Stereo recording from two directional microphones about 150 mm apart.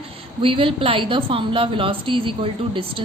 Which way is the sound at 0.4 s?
35° right (ahead or behind).